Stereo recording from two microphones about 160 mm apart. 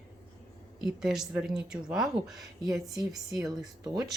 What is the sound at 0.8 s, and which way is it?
A woman's voice, 5° right (ahead or behind).